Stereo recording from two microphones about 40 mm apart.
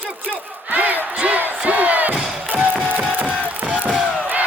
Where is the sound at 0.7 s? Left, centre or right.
Right.